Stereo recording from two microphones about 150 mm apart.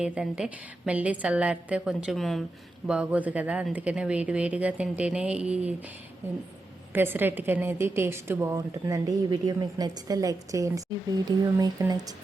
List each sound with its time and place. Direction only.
0.0 s a woman's voice: 5° right (ahead or behind)
6.9 s a woman's voice: 15° right (ahead or behind)